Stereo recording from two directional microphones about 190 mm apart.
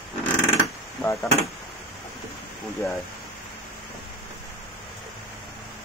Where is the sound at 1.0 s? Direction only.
15° left (ahead or behind).